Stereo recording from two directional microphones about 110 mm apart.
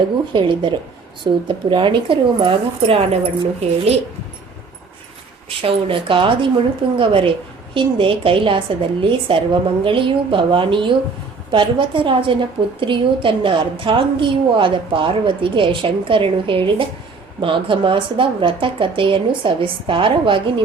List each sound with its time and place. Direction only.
0.3 s a woman's voice: 50° right (ahead or behind)
5.6 s a woman's voice: 50° right (ahead or behind)